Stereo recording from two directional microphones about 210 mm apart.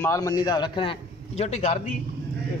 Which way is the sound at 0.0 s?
15° left (ahead or behind).